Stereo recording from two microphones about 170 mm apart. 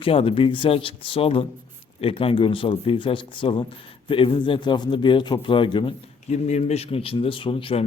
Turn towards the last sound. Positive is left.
turn(degrees=30)  # may be behind; listen again after turning